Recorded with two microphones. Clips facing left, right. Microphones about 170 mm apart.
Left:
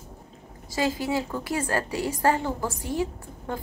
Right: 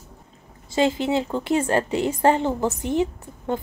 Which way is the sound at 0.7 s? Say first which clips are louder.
Right 5 dB; 25° right (ahead or behind).